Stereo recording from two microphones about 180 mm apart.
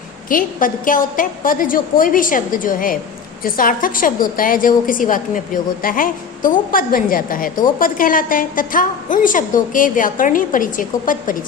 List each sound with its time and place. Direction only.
0.3 s a woman's voice: 50° left (ahead or behind)